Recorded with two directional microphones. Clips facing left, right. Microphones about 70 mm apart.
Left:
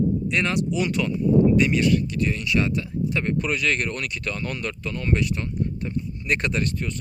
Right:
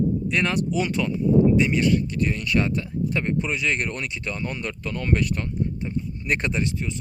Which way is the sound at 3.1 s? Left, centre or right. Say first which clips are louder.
Left 1 dB; right.